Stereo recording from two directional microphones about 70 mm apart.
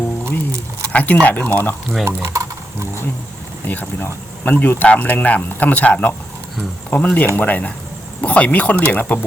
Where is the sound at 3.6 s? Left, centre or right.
Left.